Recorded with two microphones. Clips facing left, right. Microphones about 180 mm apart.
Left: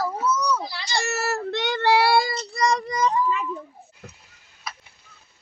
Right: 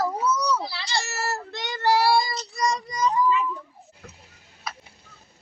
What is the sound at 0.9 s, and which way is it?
Child singing, 60° left (ahead or behind).